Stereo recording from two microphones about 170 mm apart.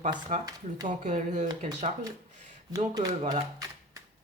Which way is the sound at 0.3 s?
50° right (ahead or behind).